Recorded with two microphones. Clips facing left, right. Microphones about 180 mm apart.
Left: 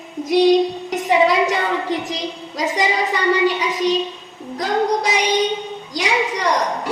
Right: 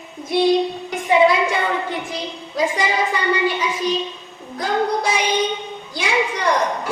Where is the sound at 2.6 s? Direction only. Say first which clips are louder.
Even; 40° left (ahead or behind).